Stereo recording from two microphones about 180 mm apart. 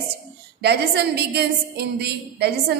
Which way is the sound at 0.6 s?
65° right (ahead or behind).